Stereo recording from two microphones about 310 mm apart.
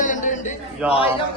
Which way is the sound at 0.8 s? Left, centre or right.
Centre.